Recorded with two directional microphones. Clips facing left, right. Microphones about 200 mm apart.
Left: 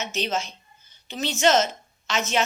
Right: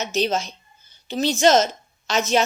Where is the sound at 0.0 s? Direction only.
40° right (ahead or behind).